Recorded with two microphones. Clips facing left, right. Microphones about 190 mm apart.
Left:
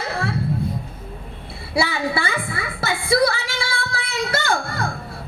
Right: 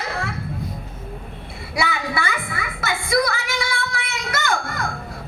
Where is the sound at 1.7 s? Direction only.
30° left (ahead or behind).